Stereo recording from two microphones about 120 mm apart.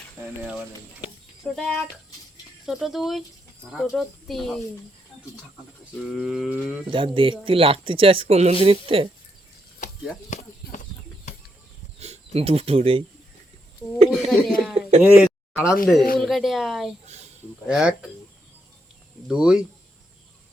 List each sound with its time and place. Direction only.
1.5 s speech: 5° left (ahead or behind)
6.1 s speech: 5° right (ahead or behind)
6.9 s speech: 45° right (ahead or behind); by 8.5 s 65° right (ahead or behind)
8.6 s speech: 50° right (ahead or behind)
10.2 s chop: 90° left
11.9 s speech: 65° right (ahead or behind)
14.1 s speech: centre (ahead or behind)
14.8 s a sound: 65° right (ahead or behind)
15.0 s speech: 10° right (ahead or behind)
19.3 s speech: 5° right (ahead or behind)